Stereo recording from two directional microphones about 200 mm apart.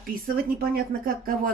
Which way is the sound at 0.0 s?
45° right (ahead or behind).